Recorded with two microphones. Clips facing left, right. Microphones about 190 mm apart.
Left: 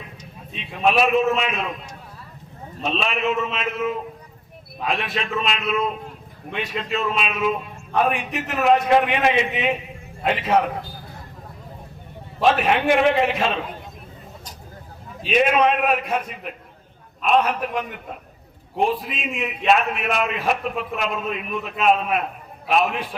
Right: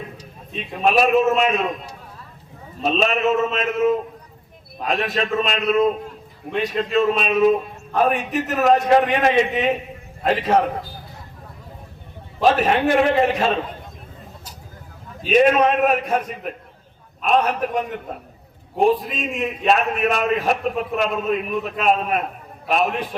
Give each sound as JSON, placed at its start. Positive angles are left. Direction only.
{"t": 0.5, "sound": "a man's voice", "side_deg": -40}
{"t": 2.8, "sound": "a man's voice", "side_deg": -45}
{"t": 12.4, "sound": "a man's voice", "side_deg": -40}
{"t": 15.2, "sound": "a man's voice", "side_deg": -40}